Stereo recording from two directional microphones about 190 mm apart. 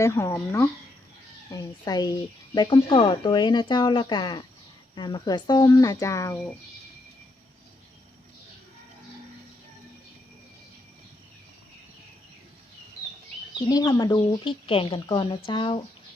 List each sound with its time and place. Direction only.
0.0 s speech: 15° left (ahead or behind)
13.7 s speech: 20° left (ahead or behind)